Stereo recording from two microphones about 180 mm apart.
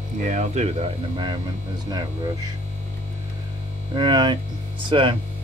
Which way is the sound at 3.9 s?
25° right (ahead or behind).